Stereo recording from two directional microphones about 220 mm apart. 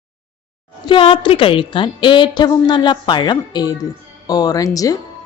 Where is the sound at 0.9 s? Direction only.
25° left (ahead or behind).